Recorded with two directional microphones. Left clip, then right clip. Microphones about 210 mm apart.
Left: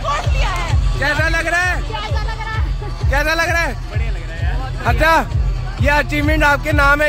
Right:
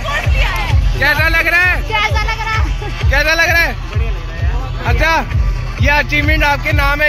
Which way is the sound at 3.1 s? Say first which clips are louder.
Right 4 dB; 30° left (ahead or behind).